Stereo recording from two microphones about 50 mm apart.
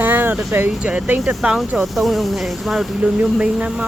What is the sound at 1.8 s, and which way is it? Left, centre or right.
Speech, centre.